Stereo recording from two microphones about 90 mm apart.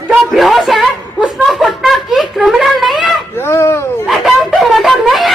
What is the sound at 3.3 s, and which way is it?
Fowl, 30° left (ahead or behind).